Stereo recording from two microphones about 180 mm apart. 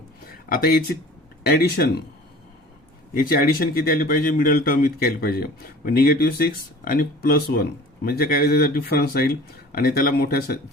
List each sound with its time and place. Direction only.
0.3 s speech: 55° left (ahead or behind)
3.2 s speech: 55° left (ahead or behind)